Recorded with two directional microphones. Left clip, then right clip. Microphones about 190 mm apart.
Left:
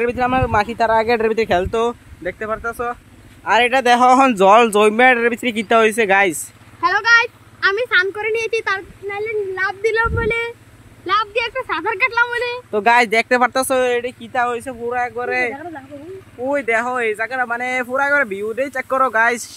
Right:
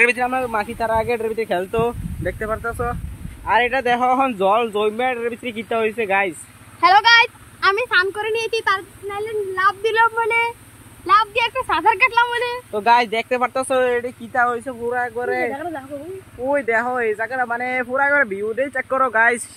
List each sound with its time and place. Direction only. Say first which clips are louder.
0.0 s speech: even; 40° left (ahead or behind)
1.7 s speech: left 2 dB; 30° left (ahead or behind)
2.2 s speech: left 1 dB; centre (ahead or behind)
3.4 s speech: left 4 dB; 50° left (ahead or behind)
6.8 s speech: right 2 dB; 40° right (ahead or behind)
7.6 s speech: left 1 dB; centre (ahead or behind)
11.3 s speech: right 1 dB; 25° right (ahead or behind)
12.0 s a woman's voice: even; 10° right (ahead or behind)
12.7 s speech: left 3 dB; 40° left (ahead or behind)
13.7 s speech: left 1 dB; 15° left (ahead or behind)
15.5 s speech: right 3 dB; 45° right (ahead or behind)
16.6 s speech: left 1 dB; 5° left (ahead or behind)